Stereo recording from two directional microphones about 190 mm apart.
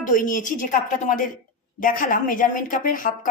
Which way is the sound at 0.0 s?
45° left (ahead or behind).